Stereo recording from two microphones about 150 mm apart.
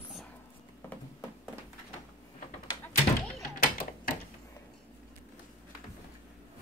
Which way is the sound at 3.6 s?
70° left (ahead or behind).